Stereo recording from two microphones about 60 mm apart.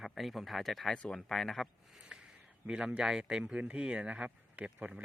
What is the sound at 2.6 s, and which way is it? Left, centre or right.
Speech, centre.